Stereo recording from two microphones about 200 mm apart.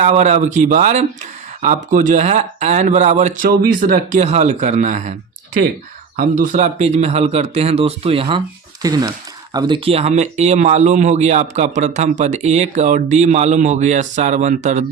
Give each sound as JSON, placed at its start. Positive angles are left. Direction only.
{"t": 0.0, "sound": "speech", "side_deg": -35}
{"t": 6.1, "sound": "speech", "side_deg": -40}